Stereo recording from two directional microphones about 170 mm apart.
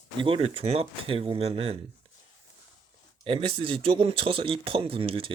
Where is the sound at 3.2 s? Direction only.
35° right (ahead or behind).